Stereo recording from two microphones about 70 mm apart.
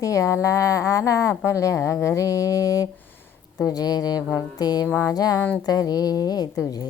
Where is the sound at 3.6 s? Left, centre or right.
Left.